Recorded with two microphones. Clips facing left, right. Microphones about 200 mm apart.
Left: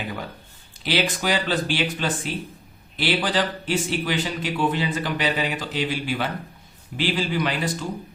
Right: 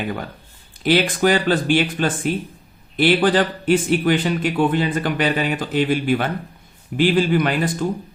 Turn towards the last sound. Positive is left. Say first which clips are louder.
# right 6 dB
turn(degrees=-50)  # may be behind; listen again after turning